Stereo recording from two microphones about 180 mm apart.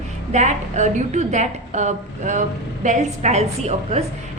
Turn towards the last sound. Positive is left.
turn(degrees=-35)  # may be behind; listen again after turning